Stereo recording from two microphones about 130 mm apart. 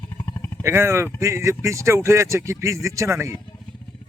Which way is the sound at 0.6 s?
20° right (ahead or behind).